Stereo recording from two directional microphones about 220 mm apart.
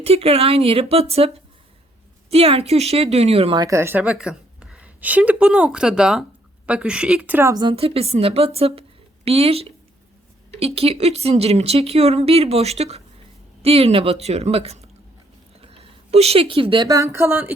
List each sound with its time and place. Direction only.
0.0 s a woman's voice: 25° right (ahead or behind); by 17.5 s 10° right (ahead or behind)